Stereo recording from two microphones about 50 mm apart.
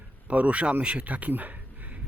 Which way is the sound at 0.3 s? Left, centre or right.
Right.